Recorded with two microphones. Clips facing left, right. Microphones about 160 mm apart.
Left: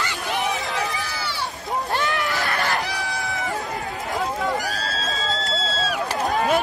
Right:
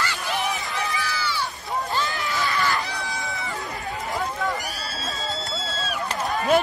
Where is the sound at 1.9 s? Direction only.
70° left (ahead or behind).